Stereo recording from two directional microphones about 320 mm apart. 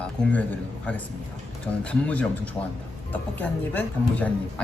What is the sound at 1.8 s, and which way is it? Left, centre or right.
Speech, centre.